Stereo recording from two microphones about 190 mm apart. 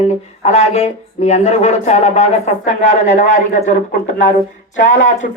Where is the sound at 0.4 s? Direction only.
35° left (ahead or behind).